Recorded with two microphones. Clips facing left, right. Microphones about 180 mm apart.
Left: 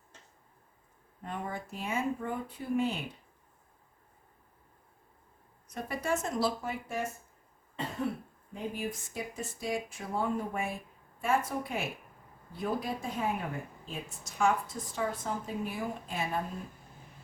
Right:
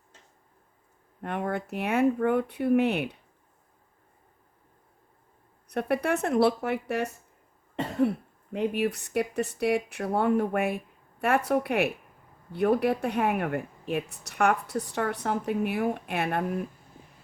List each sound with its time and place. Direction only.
1.2 s a woman's voice: 70° right (ahead or behind)
5.6 s speech: 65° right (ahead or behind)
8.5 s a woman's voice: 70° right (ahead or behind)